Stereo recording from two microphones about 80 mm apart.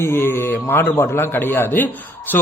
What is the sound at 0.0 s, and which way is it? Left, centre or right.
A man's voice, left.